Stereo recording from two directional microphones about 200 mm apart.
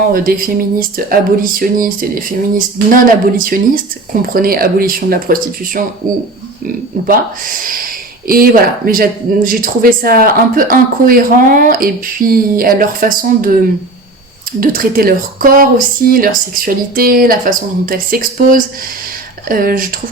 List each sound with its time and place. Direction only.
0.1 s speech: 45° right (ahead or behind)
7.1 s speech: 45° right (ahead or behind)
8.9 s speech: 45° right (ahead or behind)
14.6 s speech: 45° right (ahead or behind)